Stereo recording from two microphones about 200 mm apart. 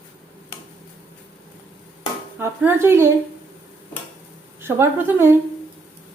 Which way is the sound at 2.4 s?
10° right (ahead or behind).